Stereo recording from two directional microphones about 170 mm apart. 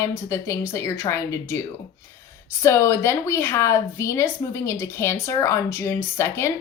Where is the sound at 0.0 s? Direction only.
20° left (ahead or behind).